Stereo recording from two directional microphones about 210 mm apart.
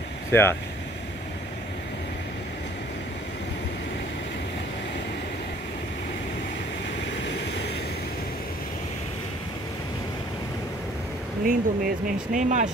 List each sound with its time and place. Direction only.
0.3 s speech: 10° left (ahead or behind)
11.4 s speech: 40° right (ahead or behind)